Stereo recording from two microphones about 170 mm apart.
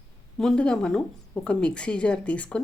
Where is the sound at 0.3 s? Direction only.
5° left (ahead or behind).